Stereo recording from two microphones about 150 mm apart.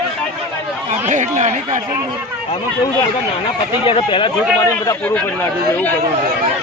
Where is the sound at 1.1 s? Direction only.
55° right (ahead or behind).